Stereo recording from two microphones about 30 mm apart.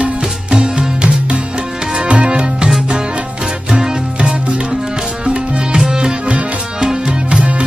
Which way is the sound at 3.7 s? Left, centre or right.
Right.